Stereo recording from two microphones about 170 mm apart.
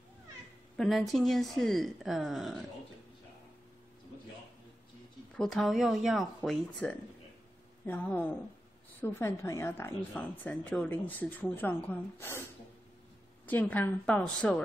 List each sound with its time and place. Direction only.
0.7 s a woman's voice: centre (ahead or behind)
5.3 s a woman's voice: 5° left (ahead or behind)
13.5 s speech: 10° left (ahead or behind)